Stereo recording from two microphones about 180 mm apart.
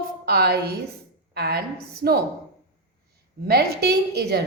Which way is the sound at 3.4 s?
60° right (ahead or behind).